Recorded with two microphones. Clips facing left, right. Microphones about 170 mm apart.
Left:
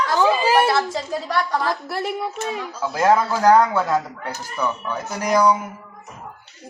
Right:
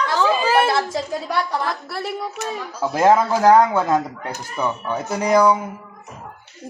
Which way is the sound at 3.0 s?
20° right (ahead or behind).